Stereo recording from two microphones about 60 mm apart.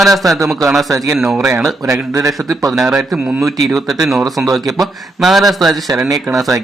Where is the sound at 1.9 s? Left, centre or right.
Right.